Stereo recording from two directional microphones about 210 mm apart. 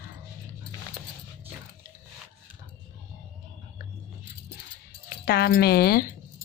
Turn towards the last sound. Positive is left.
turn(degrees=45)  # may be behind; listen again after turning